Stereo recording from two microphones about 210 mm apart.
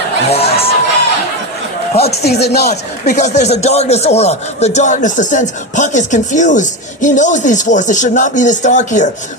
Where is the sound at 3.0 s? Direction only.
35° left (ahead or behind).